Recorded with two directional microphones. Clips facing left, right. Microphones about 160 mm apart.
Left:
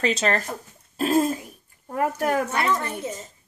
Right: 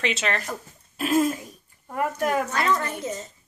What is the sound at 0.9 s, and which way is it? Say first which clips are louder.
Throat clearing: left 1 dB; 35° left (ahead or behind).